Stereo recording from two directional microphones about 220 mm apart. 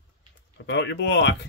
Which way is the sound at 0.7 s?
55° left (ahead or behind).